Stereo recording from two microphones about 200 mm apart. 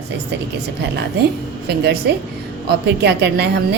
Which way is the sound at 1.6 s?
55° right (ahead or behind).